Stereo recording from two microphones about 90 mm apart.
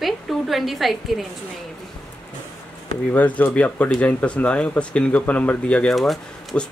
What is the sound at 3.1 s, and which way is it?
Speech, 15° left (ahead or behind).